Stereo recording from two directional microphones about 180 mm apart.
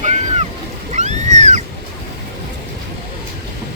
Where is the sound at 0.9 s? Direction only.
40° right (ahead or behind).